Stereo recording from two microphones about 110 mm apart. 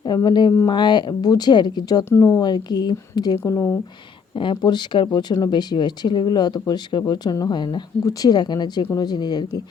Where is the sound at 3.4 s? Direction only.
20° left (ahead or behind).